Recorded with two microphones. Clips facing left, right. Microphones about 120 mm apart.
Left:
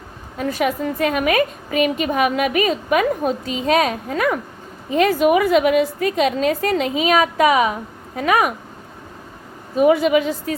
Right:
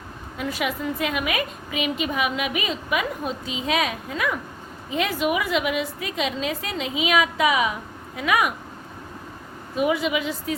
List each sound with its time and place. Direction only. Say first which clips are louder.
0.3 s a woman's voice: left 6 dB; 40° left (ahead or behind)
9.7 s a woman's voice: left 8 dB; 45° left (ahead or behind)